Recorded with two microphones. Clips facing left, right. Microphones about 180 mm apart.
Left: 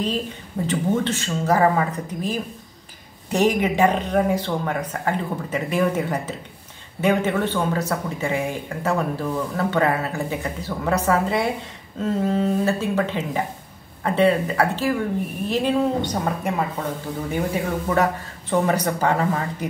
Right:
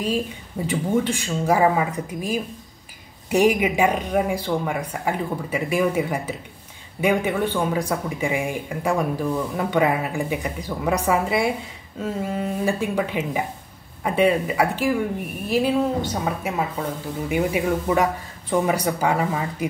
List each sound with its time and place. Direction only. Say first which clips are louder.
0.7 s speech: even; 10° right (ahead or behind)